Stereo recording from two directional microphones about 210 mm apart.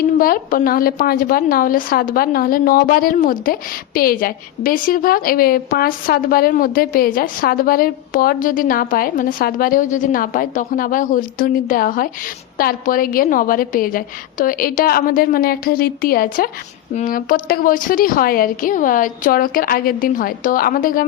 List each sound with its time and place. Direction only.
0.2 s a woman's voice: 45° left (ahead or behind)